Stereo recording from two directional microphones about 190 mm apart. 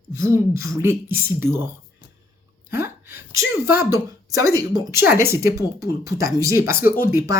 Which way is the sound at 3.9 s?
15° right (ahead or behind).